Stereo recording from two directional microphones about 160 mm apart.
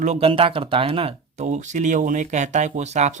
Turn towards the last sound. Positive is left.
turn(degrees=-45)  # may be behind; listen again after turning